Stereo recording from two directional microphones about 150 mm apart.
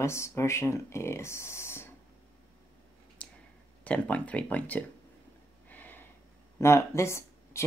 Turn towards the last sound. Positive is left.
turn(degrees=20)  # may be behind; listen again after turning